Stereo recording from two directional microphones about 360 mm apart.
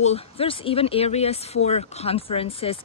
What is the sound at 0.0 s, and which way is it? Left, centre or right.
Speech, centre.